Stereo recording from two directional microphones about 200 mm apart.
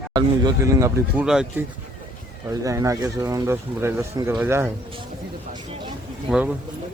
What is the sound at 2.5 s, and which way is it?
Speech, 15° right (ahead or behind).